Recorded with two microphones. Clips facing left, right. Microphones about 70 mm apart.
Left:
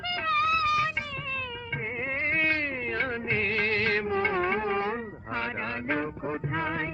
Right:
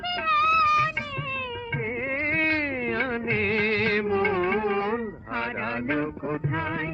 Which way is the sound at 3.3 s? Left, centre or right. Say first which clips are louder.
Right 3 dB; centre.